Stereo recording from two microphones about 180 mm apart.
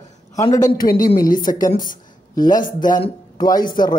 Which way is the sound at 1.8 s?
50° left (ahead or behind).